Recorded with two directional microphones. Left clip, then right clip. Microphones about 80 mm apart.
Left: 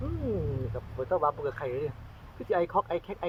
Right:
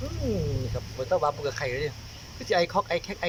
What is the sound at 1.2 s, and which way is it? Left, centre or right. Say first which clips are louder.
Speech: right 2 dB; right.